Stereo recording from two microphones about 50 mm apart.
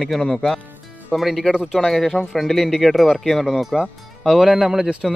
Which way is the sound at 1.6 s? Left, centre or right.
Centre.